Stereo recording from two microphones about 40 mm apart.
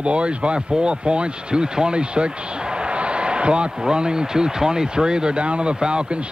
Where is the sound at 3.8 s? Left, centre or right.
Centre.